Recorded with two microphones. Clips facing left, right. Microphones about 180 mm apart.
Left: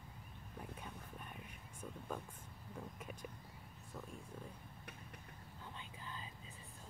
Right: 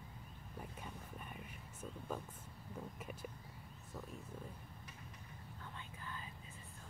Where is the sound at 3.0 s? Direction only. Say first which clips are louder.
Right 1 dB; 5° right (ahead or behind).